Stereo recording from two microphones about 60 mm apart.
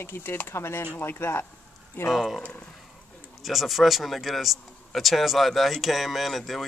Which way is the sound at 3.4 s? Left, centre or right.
Centre.